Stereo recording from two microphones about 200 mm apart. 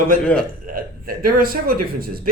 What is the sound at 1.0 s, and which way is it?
Speech, 45° right (ahead or behind).